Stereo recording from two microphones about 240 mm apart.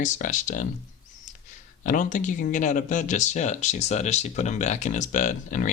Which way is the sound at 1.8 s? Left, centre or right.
Left.